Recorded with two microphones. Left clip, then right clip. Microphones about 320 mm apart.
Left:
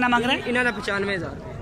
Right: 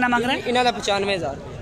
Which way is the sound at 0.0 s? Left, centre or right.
Centre.